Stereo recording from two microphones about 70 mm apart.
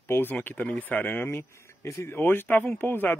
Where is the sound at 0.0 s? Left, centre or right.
Left.